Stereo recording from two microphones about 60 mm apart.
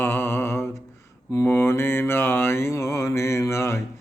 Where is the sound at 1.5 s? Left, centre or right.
Left.